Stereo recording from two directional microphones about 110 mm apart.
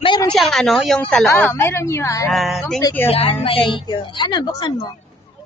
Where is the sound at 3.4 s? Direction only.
55° left (ahead or behind).